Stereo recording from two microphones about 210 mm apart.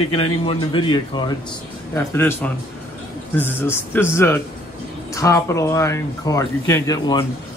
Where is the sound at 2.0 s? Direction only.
10° left (ahead or behind).